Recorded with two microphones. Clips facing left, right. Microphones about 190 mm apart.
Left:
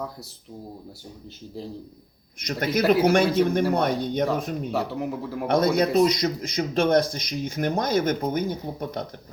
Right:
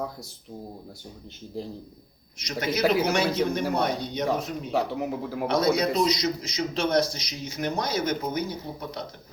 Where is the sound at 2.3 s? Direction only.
55° left (ahead or behind).